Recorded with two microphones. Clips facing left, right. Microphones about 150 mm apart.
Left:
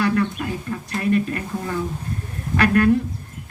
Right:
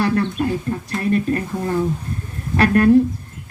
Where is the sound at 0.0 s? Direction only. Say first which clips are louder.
Right 2 dB; 30° right (ahead or behind).